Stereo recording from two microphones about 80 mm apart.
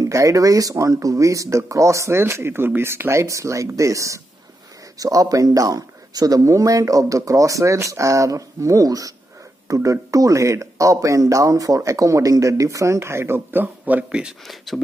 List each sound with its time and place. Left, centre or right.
0.0 s speech: right
14.4 s speech: centre